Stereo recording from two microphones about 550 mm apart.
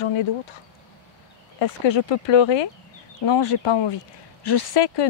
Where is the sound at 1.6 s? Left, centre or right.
Left.